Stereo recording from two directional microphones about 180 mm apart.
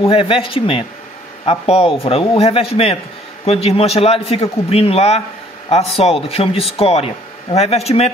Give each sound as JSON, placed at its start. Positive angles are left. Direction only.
{"t": 0.0, "sound": "a man's voice", "side_deg": 30}